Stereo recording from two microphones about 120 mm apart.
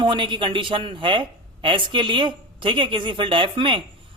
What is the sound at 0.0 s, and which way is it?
A man's voice, 40° right (ahead or behind).